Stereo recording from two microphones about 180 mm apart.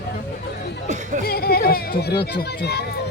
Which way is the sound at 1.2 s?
60° left (ahead or behind).